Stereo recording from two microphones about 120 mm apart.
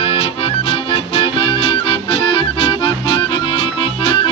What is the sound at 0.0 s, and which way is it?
Music, 50° left (ahead or behind).